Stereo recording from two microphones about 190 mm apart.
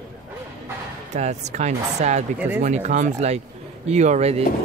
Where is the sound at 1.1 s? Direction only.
35° right (ahead or behind).